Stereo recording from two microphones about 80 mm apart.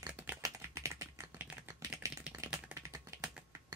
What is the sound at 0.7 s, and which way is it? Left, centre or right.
Typing, right.